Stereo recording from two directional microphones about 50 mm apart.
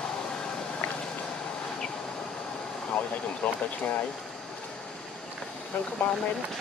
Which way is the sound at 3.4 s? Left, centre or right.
Left.